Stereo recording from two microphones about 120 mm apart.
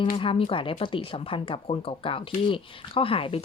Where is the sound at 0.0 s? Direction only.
50° left (ahead or behind).